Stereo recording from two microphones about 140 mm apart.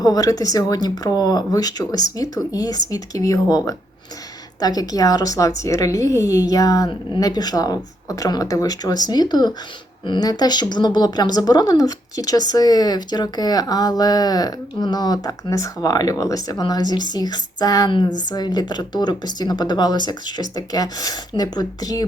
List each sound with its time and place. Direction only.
0.0 s speech: 25° left (ahead or behind)